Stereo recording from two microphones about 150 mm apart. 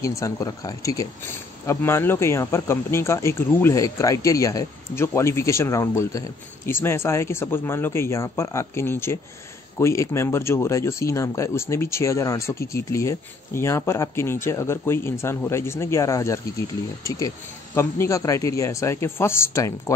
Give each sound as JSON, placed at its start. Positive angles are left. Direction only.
{"t": 0.0, "sound": "speech", "side_deg": 20}
{"t": 17.7, "sound": "a man's voice", "side_deg": 20}